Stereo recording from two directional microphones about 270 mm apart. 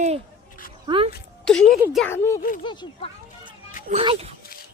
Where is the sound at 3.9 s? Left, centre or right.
Right.